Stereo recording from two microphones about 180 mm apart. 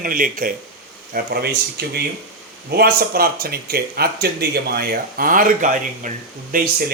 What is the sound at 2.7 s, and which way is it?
Speech, 55° right (ahead or behind).